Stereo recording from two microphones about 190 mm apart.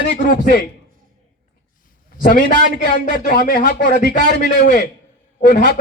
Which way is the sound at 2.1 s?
45° left (ahead or behind).